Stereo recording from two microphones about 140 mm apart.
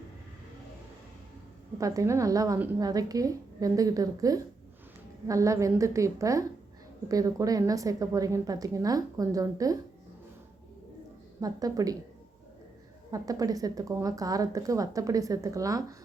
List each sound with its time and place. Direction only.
1.8 s a woman's voice: 25° right (ahead or behind)
11.3 s a woman's voice: 25° right (ahead or behind)
13.1 s a woman's voice: 25° right (ahead or behind)